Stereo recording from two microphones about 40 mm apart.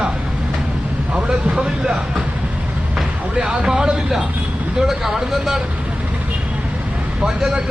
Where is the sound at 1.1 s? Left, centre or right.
Right.